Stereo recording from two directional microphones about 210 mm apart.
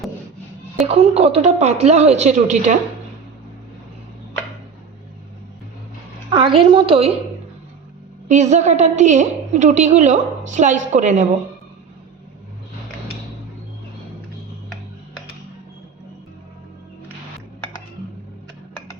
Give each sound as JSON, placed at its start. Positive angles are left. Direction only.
{"t": 0.9, "sound": "a woman's voice", "side_deg": -30}
{"t": 6.3, "sound": "a woman's voice", "side_deg": -25}
{"t": 8.3, "sound": "a woman's voice", "side_deg": -35}